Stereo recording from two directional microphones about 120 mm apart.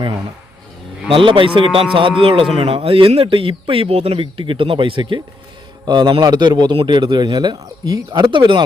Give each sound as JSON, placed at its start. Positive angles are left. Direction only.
{"t": 1.1, "sound": "a man's voice", "side_deg": -45}